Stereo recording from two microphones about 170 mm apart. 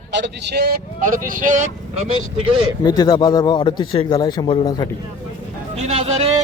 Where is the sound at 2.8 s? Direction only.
25° left (ahead or behind).